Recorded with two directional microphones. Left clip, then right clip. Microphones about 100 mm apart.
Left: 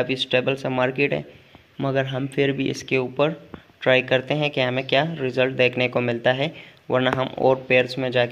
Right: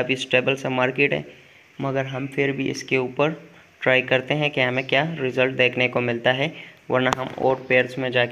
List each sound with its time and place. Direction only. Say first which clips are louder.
0.0 s speech: right 1 dB; 25° left (ahead or behind)
1.8 s speech: left 2 dB; 45° left (ahead or behind)
2.0 s speech: left 1 dB; 55° left (ahead or behind)
2.9 s speech: even; 30° left (ahead or behind)